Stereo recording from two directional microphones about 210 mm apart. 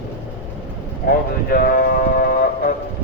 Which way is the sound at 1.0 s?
45° left (ahead or behind).